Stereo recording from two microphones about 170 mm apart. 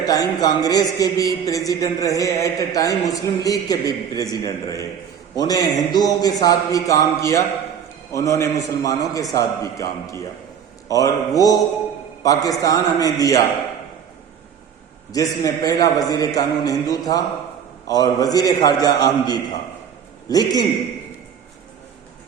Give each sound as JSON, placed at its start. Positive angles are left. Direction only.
{"t": 0.0, "sound": "a man's voice", "side_deg": 20}
{"t": 15.1, "sound": "a man's voice", "side_deg": 20}